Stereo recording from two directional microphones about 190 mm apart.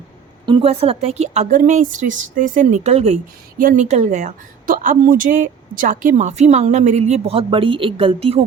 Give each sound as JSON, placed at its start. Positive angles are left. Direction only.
{"t": 0.4, "sound": "a woman's voice", "side_deg": -30}